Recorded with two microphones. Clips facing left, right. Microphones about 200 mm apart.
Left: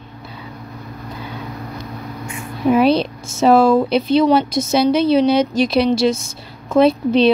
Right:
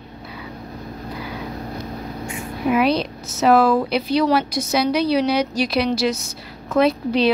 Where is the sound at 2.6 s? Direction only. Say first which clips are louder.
Left 5 dB; 30° left (ahead or behind).